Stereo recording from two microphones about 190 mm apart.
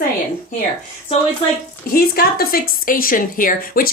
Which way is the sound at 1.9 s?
50° left (ahead or behind).